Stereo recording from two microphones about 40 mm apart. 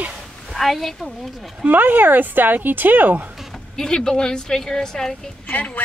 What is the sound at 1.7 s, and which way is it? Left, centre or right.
A woman's voice, right.